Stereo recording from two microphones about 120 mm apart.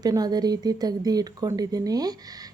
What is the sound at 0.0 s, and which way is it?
Speech, 35° right (ahead or behind).